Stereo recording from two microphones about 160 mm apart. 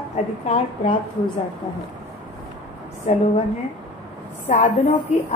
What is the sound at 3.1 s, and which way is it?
Speech, 45° left (ahead or behind).